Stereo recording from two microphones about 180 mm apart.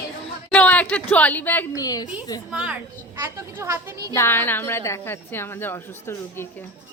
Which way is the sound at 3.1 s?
15° right (ahead or behind).